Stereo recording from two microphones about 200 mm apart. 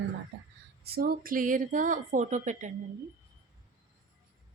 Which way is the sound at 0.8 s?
50° right (ahead or behind).